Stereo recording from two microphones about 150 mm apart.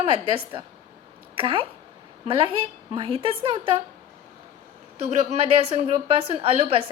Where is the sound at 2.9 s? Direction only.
35° right (ahead or behind).